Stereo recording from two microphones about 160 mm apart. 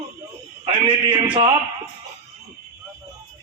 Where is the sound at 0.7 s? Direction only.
30° right (ahead or behind).